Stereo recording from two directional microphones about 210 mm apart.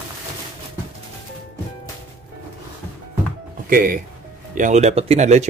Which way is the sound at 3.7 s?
40° right (ahead or behind).